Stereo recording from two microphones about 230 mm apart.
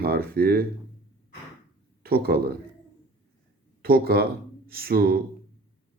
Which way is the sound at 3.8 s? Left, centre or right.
Right.